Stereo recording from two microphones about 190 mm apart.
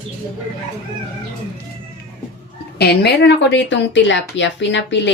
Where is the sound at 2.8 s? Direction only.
60° left (ahead or behind).